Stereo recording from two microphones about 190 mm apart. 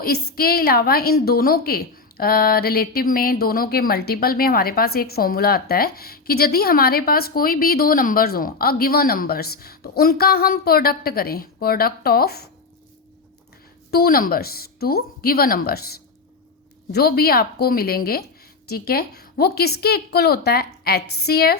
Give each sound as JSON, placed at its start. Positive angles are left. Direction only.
{"t": 0.0, "sound": "a woman's voice", "side_deg": 50}
{"t": 13.9, "sound": "a woman's voice", "side_deg": 50}